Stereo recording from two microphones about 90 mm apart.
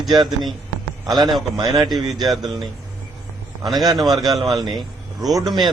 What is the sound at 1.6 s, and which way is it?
Speech, 55° right (ahead or behind).